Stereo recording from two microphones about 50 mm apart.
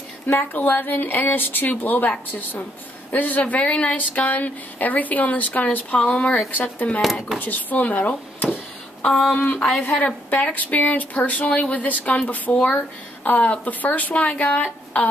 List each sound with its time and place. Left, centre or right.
0.3 s speech: left
6.5 s speech: left
9.1 s a sound: centre
9.4 s speech: left